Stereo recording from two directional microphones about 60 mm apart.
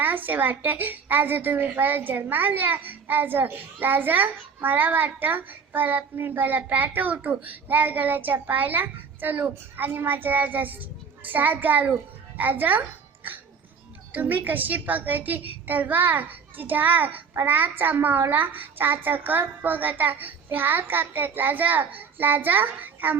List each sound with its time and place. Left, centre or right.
0.0 s a woman's voice: right
14.1 s a woman's voice: right